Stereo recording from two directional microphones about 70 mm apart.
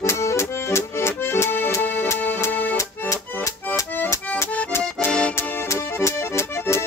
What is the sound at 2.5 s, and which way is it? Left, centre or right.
Accordion, left.